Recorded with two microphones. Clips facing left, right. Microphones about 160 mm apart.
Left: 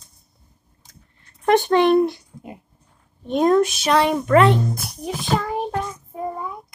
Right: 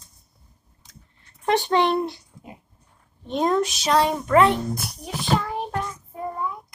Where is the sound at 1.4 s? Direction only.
50° left (ahead or behind).